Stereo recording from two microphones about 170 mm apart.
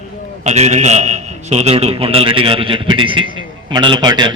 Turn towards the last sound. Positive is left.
turn(degrees=-25)  # may be behind; listen again after turning